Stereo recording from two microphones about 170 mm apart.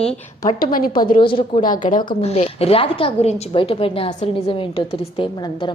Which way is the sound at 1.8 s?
55° left (ahead or behind).